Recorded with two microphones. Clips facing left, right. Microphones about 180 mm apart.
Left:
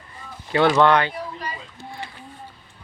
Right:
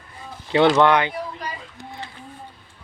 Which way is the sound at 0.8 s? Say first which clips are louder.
Even; 15° right (ahead or behind).